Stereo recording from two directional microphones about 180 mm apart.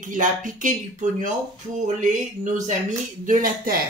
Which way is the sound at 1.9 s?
45° right (ahead or behind).